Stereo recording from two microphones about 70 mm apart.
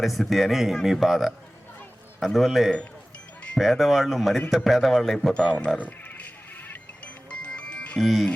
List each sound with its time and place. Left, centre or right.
0.0 s speech: centre
5.5 s speech: left
6.7 s music: centre
7.9 s speech: centre